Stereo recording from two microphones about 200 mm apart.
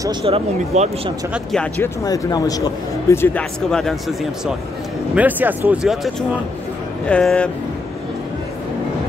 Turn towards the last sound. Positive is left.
turn(degrees=5)  # may be behind; listen again after turning